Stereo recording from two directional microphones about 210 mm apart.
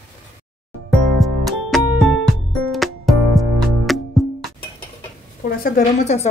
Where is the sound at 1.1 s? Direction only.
Centre (ahead or behind).